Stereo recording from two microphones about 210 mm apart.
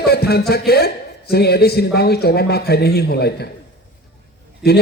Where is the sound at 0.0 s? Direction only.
50° left (ahead or behind).